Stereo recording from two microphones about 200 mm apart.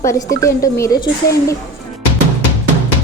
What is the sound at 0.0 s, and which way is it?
A woman's voice, 15° left (ahead or behind).